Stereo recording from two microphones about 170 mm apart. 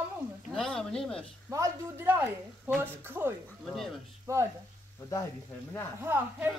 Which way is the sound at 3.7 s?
Centre (ahead or behind).